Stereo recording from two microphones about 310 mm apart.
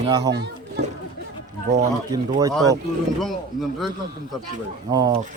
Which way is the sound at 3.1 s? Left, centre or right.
Centre.